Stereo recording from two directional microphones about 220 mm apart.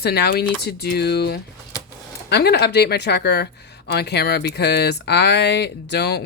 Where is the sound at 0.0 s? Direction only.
50° left (ahead or behind).